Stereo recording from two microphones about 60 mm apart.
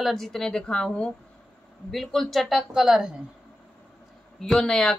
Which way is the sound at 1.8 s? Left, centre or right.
Centre.